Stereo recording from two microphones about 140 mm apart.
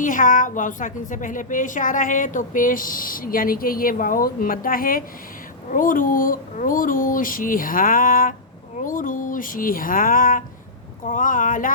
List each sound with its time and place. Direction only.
0.0 s a woman's voice: 70° left (ahead or behind); by 5.0 s 90° left
5.7 s a woman's voice: 75° left (ahead or behind)